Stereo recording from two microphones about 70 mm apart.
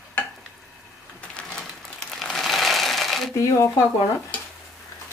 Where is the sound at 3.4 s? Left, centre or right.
Left.